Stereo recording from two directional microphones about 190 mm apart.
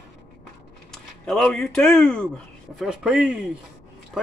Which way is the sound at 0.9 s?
5° left (ahead or behind).